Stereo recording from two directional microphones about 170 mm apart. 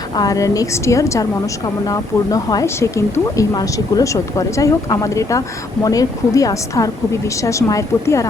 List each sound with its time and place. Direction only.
0.2 s speech: 20° left (ahead or behind)